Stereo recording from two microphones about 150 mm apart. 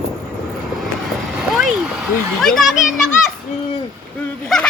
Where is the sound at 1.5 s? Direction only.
Centre (ahead or behind).